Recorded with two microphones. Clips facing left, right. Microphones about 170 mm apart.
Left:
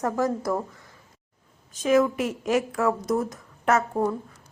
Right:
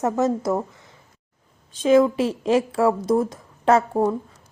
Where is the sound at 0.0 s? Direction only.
20° right (ahead or behind).